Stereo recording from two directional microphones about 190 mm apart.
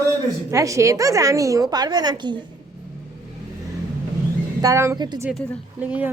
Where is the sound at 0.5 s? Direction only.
15° right (ahead or behind).